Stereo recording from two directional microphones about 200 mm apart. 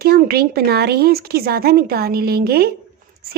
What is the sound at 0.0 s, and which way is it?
A woman's voice, 50° right (ahead or behind).